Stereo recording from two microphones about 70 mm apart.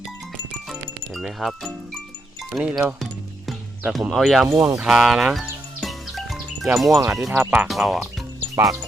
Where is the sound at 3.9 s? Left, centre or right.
Centre.